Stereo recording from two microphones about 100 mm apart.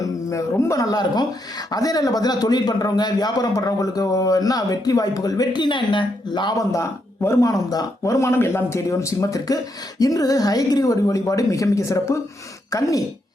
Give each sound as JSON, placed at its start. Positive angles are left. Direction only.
{"t": 0.0, "sound": "speech", "side_deg": 30}
{"t": 6.6, "sound": "speech", "side_deg": 35}